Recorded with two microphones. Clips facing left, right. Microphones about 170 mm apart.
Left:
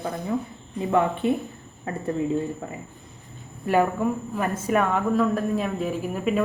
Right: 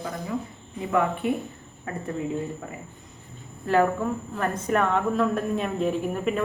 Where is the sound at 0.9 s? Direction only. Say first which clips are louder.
Left 2 dB; 30° left (ahead or behind).